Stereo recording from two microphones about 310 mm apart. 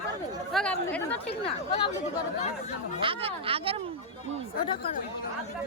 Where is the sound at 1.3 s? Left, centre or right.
Centre.